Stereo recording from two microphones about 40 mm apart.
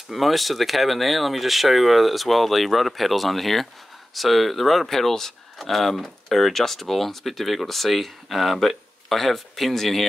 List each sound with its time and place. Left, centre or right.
0.1 s speech: centre